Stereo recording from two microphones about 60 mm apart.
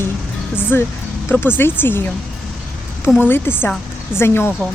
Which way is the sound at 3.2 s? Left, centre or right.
Left.